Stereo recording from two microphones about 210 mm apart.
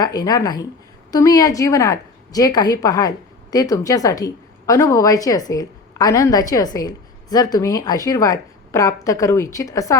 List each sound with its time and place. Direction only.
0.0 s a woman's voice: 20° left (ahead or behind)